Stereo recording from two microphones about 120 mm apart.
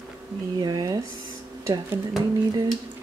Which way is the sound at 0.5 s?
35° right (ahead or behind).